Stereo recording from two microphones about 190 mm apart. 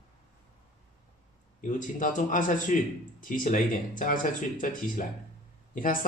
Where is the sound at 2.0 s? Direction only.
45° left (ahead or behind).